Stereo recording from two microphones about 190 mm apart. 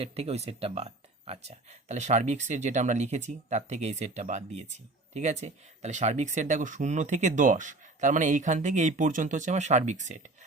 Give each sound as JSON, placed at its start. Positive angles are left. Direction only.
{"t": 0.0, "sound": "speech", "side_deg": -30}